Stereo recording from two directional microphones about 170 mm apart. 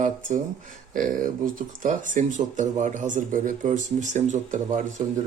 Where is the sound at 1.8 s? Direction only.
50° right (ahead or behind).